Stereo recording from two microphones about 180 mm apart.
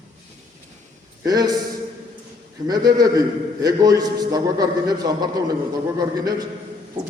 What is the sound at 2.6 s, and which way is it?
A man's voice, 20° right (ahead or behind).